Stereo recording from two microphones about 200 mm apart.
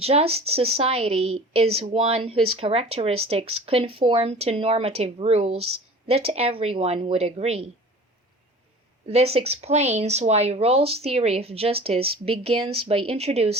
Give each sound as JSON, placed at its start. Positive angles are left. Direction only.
{"t": 0.0, "sound": "speech", "side_deg": -30}
{"t": 9.0, "sound": "speech", "side_deg": -30}